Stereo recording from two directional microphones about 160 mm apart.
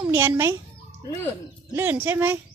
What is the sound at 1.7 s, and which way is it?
Speech, 10° right (ahead or behind).